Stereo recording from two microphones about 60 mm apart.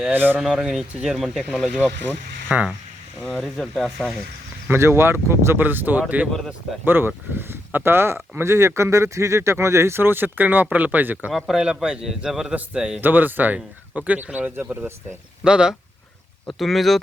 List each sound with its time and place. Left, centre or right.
0.1 s speech: right
0.3 s a man's voice: centre
1.4 s a man's voice: right
3.3 s speech: centre
4.7 s speech: right
6.8 s speech: right
11.3 s a man's voice: centre
13.0 s a man's voice: right; by 15.7 s centre
16.6 s speech: centre